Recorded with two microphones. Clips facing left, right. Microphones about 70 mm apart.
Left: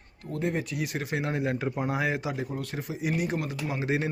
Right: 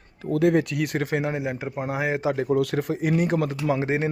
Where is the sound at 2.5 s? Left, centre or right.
Right.